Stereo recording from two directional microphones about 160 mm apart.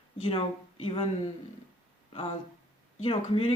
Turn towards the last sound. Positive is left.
turn(degrees=35)  # may be behind; listen again after turning